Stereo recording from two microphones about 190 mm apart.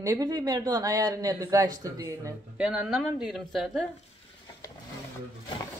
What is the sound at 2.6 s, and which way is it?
Speech, 5° right (ahead or behind).